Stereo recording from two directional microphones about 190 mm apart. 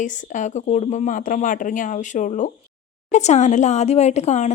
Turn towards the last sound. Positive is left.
turn(degrees=35)  # may be behind; listen again after turning